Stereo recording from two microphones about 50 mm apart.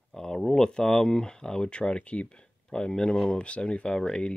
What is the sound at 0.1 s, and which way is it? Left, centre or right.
Speech, centre.